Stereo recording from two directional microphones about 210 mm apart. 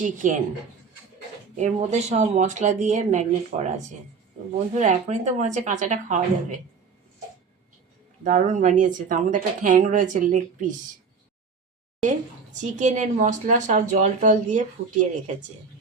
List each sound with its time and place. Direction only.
0.0 s speech: 40° right (ahead or behind)
1.5 s speech: 35° right (ahead or behind)
8.2 s speech: 35° right (ahead or behind)
12.5 s speech: 35° right (ahead or behind)